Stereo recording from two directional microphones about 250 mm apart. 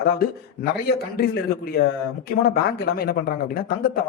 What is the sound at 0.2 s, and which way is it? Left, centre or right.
A woman's voice, left.